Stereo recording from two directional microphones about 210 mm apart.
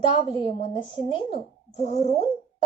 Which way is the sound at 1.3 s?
30° right (ahead or behind).